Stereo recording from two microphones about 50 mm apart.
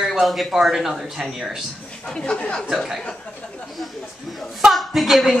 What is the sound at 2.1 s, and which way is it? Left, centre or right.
Speech, centre.